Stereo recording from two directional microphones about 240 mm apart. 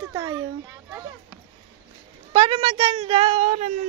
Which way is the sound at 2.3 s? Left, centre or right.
Right.